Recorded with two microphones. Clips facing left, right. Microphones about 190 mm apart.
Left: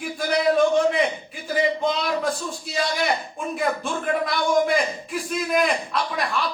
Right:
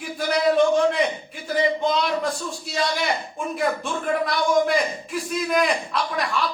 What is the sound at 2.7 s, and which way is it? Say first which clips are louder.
Speech: even; centre (ahead or behind).